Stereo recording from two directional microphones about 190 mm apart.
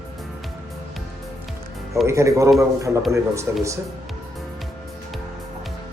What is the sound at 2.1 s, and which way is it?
Speech, 15° right (ahead or behind).